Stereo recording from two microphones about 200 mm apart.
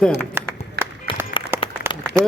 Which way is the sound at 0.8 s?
55° right (ahead or behind).